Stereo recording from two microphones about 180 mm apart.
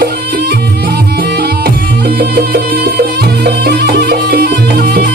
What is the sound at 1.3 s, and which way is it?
Music, 60° right (ahead or behind).